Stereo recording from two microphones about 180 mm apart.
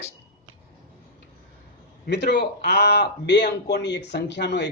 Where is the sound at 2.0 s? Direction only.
70° left (ahead or behind).